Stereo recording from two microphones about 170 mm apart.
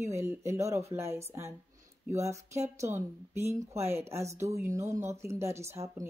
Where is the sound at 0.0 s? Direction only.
15° right (ahead or behind).